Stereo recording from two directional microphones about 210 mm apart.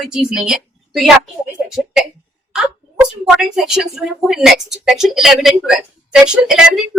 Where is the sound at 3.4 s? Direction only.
Centre (ahead or behind).